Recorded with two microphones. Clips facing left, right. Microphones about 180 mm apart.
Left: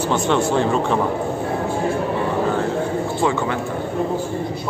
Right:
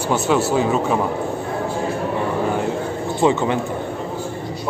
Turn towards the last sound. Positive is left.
turn(degrees=-20)  # may be behind; listen again after turning